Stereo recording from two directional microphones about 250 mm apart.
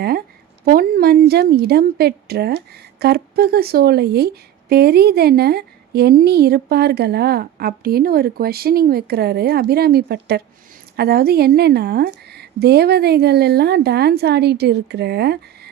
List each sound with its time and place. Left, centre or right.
0.6 s a woman's voice: right